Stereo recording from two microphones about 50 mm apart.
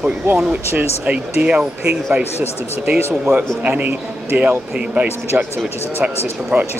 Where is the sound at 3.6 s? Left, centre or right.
Right.